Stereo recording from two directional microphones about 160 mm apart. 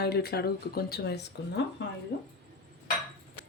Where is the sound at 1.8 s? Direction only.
90° left.